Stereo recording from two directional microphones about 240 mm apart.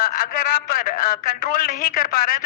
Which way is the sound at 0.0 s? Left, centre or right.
Left.